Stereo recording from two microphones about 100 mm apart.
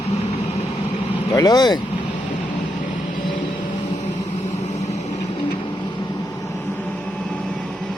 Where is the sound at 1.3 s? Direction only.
40° left (ahead or behind).